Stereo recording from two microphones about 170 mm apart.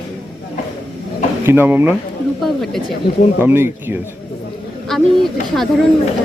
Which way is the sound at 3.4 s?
15° right (ahead or behind).